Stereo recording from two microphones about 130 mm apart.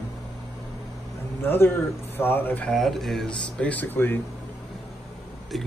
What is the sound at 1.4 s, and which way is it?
Speech, 15° left (ahead or behind).